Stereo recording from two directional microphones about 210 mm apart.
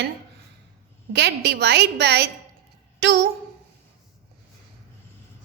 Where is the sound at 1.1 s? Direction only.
50° right (ahead or behind).